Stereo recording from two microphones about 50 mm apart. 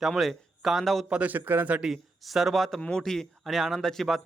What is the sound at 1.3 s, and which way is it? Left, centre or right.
Speech, right.